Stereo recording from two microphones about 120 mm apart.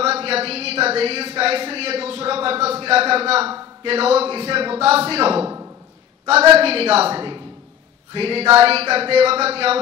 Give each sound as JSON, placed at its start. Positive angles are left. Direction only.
{"t": 0.0, "sound": "speech", "side_deg": -55}
{"t": 6.6, "sound": "a woman's voice", "side_deg": -55}